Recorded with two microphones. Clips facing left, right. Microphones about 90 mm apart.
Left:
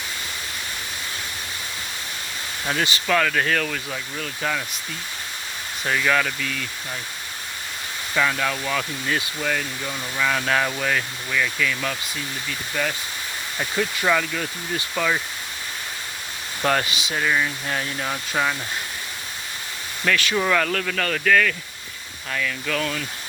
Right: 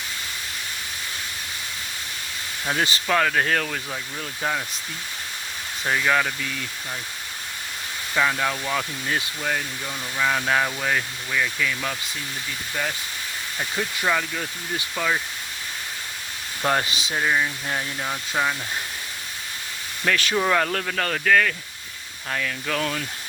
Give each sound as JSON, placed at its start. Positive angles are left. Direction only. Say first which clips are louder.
{"t": 2.7, "sound": "speech", "louder": "even", "side_deg": -35}
{"t": 5.8, "sound": "speech", "louder": "even", "side_deg": -20}
{"t": 8.1, "sound": "speech", "louder": "even", "side_deg": -15}
{"t": 13.7, "sound": "speech", "louder": "left 3 dB", "side_deg": -10}
{"t": 16.8, "sound": "speech", "louder": "even", "side_deg": -35}
{"t": 18.0, "sound": "speech", "louder": "left 1 dB", "side_deg": 0}
{"t": 20.1, "sound": "speech", "louder": "even", "side_deg": -35}
{"t": 22.3, "sound": "speech", "louder": "left 1 dB", "side_deg": -40}
{"t": 22.6, "sound": "speech", "louder": "even", "side_deg": -30}